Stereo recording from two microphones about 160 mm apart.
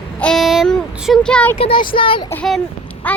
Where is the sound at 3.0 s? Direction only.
10° left (ahead or behind).